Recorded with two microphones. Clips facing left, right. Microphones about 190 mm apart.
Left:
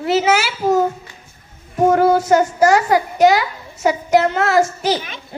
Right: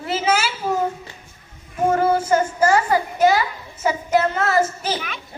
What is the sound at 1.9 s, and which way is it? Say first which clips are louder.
A woman's voice: left 4 dB; 80° left.